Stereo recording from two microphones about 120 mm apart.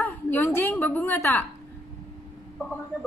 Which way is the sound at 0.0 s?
15° left (ahead or behind).